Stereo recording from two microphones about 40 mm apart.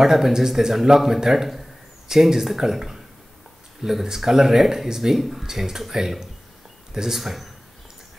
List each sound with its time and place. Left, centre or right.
0.0 s speech: centre
7.2 s speech: centre